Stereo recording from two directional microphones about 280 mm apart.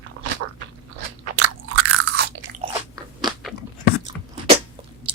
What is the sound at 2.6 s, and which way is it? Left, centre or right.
Biting, centre.